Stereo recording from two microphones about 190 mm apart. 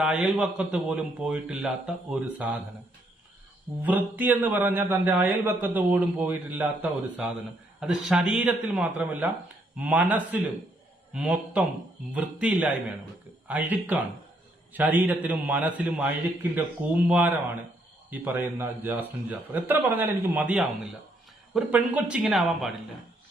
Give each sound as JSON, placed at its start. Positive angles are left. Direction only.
{"t": 0.0, "sound": "a man's voice", "side_deg": -5}
{"t": 3.8, "sound": "a man's voice", "side_deg": -10}